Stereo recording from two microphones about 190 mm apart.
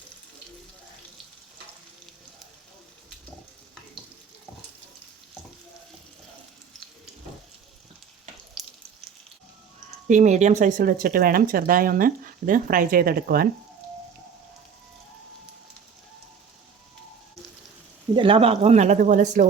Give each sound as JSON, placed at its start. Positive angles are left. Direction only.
{"t": 8.6, "sound": "frying", "side_deg": 0}
{"t": 10.1, "sound": "speech", "side_deg": -40}
{"t": 18.1, "sound": "speech", "side_deg": -25}